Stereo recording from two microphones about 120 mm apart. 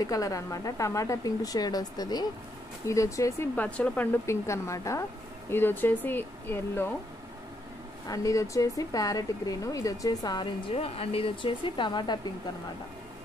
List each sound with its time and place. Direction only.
0.0 s a woman's voice: 30° left (ahead or behind)
3.5 s a woman's voice: 10° left (ahead or behind)
8.1 s speech: 30° left (ahead or behind)
10.7 s speech: 55° left (ahead or behind); by 12.2 s 40° left (ahead or behind)